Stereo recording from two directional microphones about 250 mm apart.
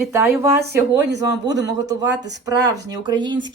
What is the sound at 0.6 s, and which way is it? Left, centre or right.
Speech, right.